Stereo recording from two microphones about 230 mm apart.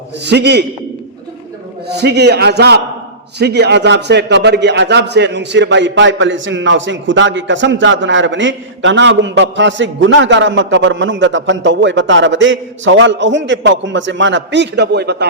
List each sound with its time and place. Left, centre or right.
0.3 s a man's voice: right
2.0 s a man's voice: right